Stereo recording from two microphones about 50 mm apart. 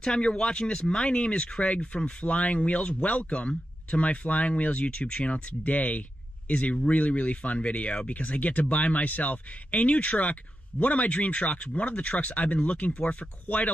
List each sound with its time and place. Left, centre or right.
0.0 s speech: centre